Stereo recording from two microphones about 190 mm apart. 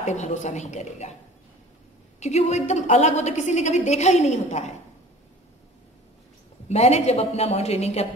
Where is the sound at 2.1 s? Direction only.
35° left (ahead or behind).